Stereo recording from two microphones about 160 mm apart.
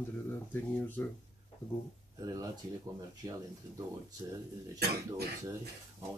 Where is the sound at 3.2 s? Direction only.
20° right (ahead or behind).